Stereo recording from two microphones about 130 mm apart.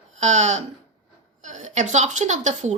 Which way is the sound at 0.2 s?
65° right (ahead or behind).